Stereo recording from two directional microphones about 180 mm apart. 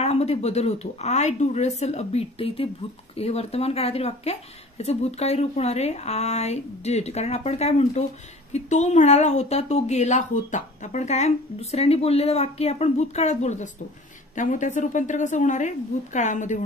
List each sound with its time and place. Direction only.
0.0 s a woman's voice: 35° left (ahead or behind)